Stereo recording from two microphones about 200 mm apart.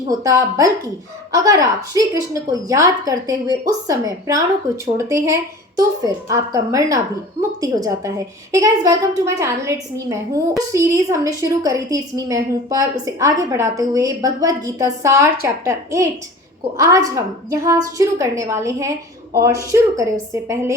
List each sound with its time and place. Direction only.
0.2 s a woman's voice: 15° right (ahead or behind)